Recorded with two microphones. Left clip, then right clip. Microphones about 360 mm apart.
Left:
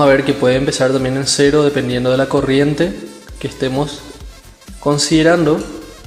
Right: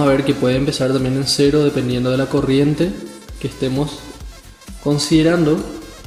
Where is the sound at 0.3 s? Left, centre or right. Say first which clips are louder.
Left 3 dB; centre.